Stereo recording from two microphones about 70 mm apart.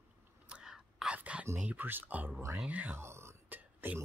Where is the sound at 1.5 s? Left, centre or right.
Right.